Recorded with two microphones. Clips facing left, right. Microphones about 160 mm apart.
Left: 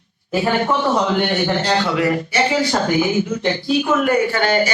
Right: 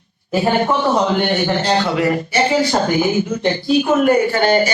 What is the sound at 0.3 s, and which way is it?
A man's voice, 30° right (ahead or behind).